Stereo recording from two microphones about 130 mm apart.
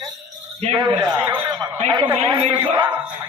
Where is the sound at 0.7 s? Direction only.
40° right (ahead or behind).